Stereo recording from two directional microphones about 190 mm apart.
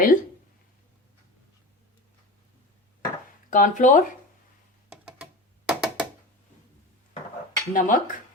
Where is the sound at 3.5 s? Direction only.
45° left (ahead or behind).